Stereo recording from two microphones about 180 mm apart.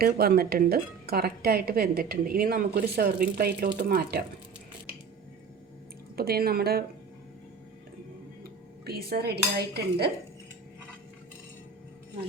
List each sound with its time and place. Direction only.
0.0 s speech: 60° right (ahead or behind)
6.1 s speech: 60° right (ahead or behind)
8.8 s speech: 60° right (ahead or behind)